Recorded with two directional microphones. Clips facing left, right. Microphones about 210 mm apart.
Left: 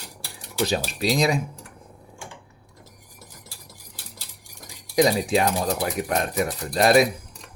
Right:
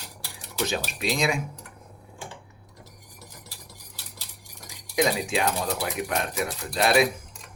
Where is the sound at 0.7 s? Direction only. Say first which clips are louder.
Left 5 dB; 35° left (ahead or behind).